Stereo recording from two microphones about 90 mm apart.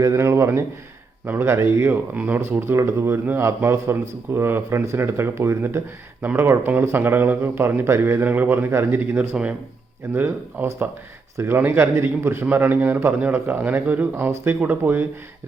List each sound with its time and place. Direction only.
0.0 s a man's voice: 30° right (ahead or behind)